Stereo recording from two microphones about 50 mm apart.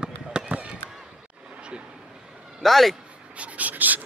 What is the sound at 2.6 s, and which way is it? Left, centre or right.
Speech, centre.